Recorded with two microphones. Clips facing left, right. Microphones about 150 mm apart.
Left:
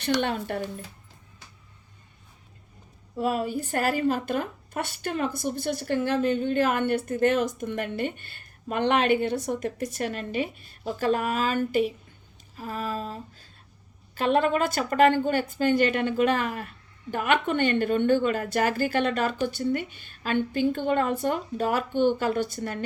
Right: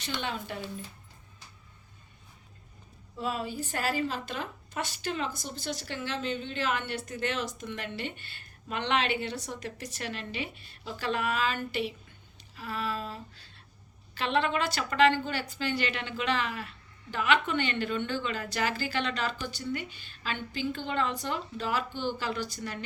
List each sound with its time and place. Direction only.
0.0 s speech: 60° left (ahead or behind)
3.2 s a woman's voice: 55° left (ahead or behind)